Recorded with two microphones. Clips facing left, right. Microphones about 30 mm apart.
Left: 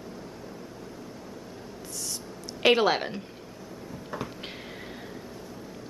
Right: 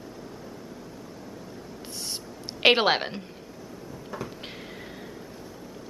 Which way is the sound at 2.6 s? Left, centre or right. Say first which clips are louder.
Right 1 dB; right.